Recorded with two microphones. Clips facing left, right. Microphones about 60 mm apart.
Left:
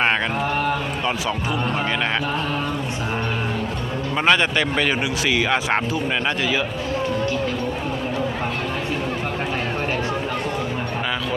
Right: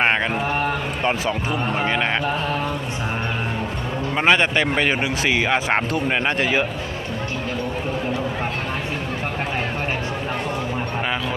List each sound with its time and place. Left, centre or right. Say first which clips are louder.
0.0 s a sound: right 1 dB; right
1.3 s speech: even; centre
4.2 s speech: right 1 dB; right